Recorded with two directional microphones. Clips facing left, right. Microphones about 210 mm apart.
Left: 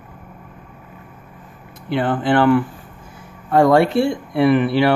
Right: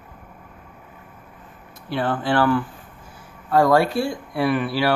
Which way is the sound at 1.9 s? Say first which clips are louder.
Left 4 dB; 20° left (ahead or behind).